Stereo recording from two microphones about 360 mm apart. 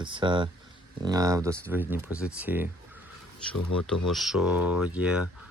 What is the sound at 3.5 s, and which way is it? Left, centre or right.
Speech, left.